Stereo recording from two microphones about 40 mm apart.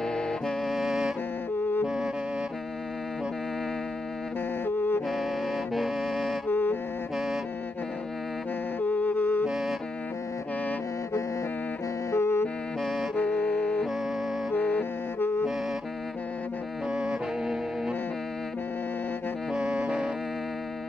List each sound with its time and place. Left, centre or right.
0.0 s music: centre
0.7 s music: centre
1.5 s music: left
4.6 s music: left
5.8 s music: centre
6.4 s music: left
8.8 s music: left
9.5 s music: centre
12.2 s music: left
13.1 s music: left
15.1 s music: left
16.9 s music: centre
19.5 s saxophone: centre